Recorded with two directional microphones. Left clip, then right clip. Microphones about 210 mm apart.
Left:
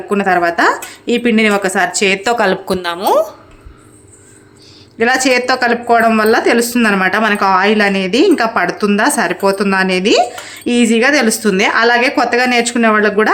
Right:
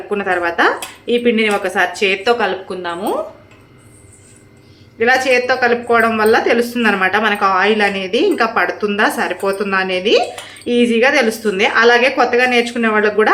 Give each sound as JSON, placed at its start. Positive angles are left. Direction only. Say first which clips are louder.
{"t": 0.1, "sound": "speech", "louder": "left 5 dB", "side_deg": 45}
{"t": 4.9, "sound": "speech", "louder": "left 1 dB", "side_deg": 50}